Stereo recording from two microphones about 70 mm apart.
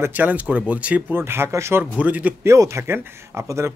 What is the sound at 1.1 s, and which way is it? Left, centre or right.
Speech, right.